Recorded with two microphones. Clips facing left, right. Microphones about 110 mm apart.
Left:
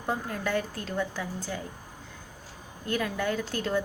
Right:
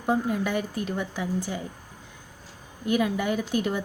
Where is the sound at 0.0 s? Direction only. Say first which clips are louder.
Right 6 dB; 15° right (ahead or behind).